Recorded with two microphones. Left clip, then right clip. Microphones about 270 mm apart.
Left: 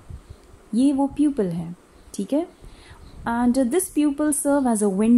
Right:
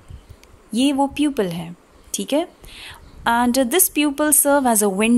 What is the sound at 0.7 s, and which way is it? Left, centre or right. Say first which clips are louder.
Speech: right 2 dB; right.